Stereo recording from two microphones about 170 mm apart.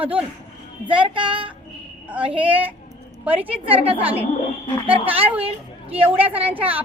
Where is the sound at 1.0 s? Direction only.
30° right (ahead or behind).